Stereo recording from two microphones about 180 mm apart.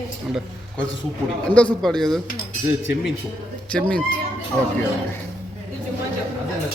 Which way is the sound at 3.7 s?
5° left (ahead or behind).